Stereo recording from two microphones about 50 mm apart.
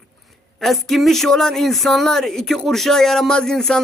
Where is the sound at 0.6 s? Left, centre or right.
Centre.